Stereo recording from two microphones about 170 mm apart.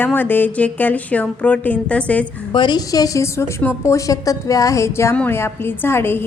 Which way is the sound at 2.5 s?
25° left (ahead or behind).